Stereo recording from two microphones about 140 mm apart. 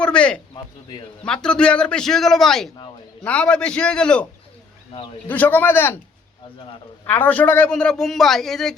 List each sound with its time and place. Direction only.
0.0 s a man's voice: 10° left (ahead or behind)
0.5 s speech: 35° left (ahead or behind)
1.2 s a man's voice: 5° left (ahead or behind)
5.3 s a man's voice: 10° left (ahead or behind)
7.1 s a man's voice: 10° left (ahead or behind)